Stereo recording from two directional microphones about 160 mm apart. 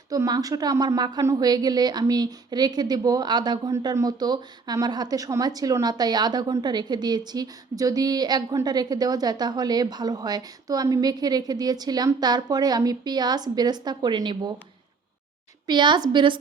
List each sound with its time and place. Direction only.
0.1 s a woman's voice: 20° right (ahead or behind)
15.6 s a woman's voice: 30° right (ahead or behind)